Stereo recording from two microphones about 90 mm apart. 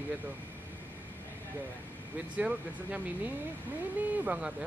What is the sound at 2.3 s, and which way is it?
Speech, 15° right (ahead or behind).